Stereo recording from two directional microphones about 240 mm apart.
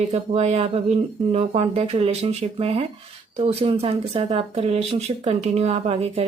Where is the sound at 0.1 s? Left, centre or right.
Right.